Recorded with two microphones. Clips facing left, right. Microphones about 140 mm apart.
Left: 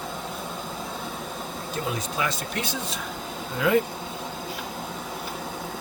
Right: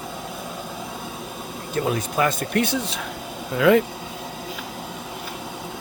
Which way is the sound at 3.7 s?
90° right.